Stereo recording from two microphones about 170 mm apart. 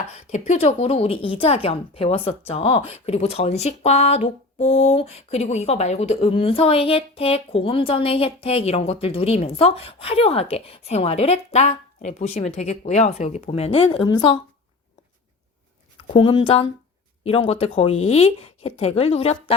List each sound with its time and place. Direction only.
0.3 s speech: 45° left (ahead or behind); by 14.3 s 25° left (ahead or behind)
16.0 s speech: 30° left (ahead or behind)